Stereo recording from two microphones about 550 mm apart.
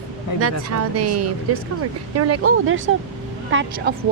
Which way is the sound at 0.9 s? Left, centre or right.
Right.